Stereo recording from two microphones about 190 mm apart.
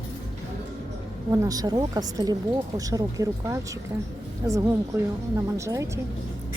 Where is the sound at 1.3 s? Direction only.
20° right (ahead or behind).